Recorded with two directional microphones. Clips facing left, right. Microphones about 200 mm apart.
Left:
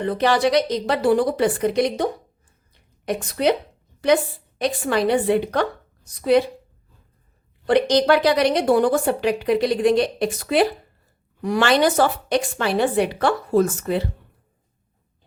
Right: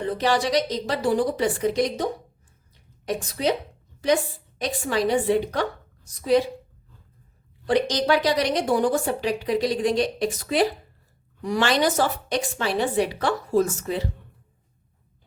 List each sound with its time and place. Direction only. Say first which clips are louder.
0.1 s a woman's voice: left 4 dB; 60° left (ahead or behind)
3.1 s a woman's voice: left 4 dB; 65° left (ahead or behind)
7.7 s a woman's voice: left 5 dB; 60° left (ahead or behind)